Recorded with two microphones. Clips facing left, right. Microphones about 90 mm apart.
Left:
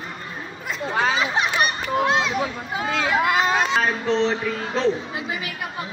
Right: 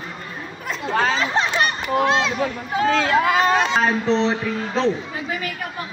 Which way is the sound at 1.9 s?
5° left (ahead or behind).